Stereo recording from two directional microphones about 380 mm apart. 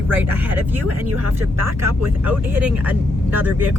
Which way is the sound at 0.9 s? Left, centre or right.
Right.